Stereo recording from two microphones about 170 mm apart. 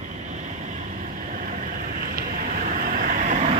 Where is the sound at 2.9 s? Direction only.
55° right (ahead or behind).